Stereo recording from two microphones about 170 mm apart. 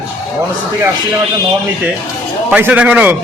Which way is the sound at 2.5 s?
10° right (ahead or behind).